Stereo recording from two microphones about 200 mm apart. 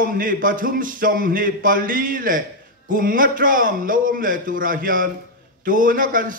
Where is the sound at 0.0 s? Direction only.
45° right (ahead or behind).